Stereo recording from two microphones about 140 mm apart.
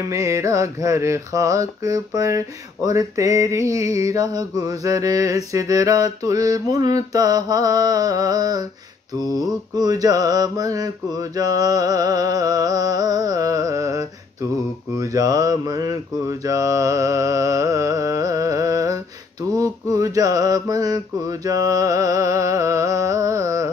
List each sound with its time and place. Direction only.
0.1 s mantra: 20° right (ahead or behind)